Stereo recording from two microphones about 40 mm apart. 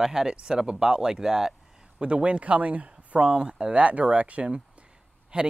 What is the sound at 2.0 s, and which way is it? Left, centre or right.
A man's voice, right.